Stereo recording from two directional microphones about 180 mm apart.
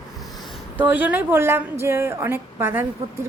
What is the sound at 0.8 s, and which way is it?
A woman's voice, 10° right (ahead or behind).